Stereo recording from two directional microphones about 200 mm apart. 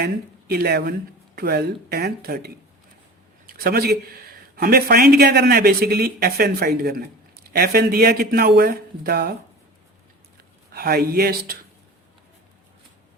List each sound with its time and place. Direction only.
0.0 s a man's voice: 50° right (ahead or behind)
10.7 s a man's voice: 50° right (ahead or behind)